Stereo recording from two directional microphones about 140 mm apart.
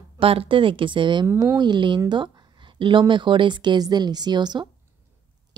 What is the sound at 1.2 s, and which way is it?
Speech, 15° right (ahead or behind).